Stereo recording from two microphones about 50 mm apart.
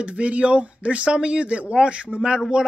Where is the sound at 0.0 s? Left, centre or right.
Right.